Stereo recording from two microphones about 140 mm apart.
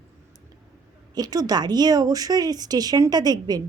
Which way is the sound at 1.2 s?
25° right (ahead or behind).